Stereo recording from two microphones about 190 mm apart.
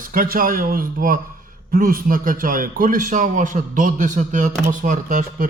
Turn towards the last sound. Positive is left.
turn(degrees=-45)  # may be behind; listen again after turning